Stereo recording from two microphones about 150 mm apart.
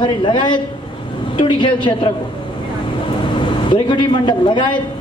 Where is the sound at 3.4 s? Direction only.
30° left (ahead or behind).